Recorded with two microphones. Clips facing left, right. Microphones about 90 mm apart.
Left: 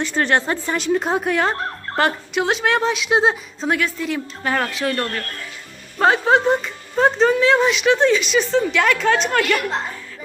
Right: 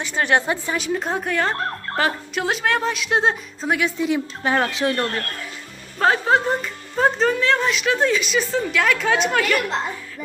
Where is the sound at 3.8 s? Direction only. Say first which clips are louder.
Right 2 dB; 20° right (ahead or behind).